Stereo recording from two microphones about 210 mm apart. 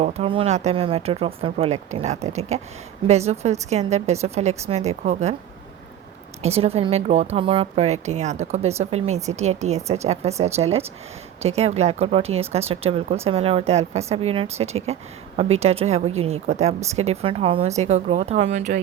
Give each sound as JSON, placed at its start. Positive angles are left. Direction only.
{"t": 0.0, "sound": "speech", "side_deg": -30}
{"t": 6.4, "sound": "speech", "side_deg": -30}